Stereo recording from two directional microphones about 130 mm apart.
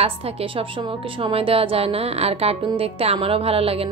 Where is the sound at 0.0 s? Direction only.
45° right (ahead or behind).